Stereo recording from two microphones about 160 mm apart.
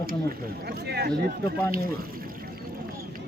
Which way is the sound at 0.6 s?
90° right.